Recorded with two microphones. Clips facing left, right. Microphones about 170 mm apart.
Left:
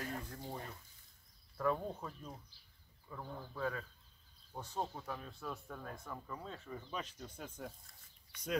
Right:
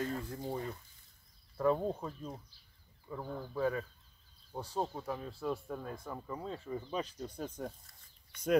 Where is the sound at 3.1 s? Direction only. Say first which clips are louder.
Right 7 dB; 20° right (ahead or behind).